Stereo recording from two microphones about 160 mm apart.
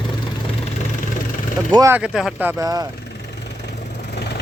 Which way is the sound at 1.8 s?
15° right (ahead or behind).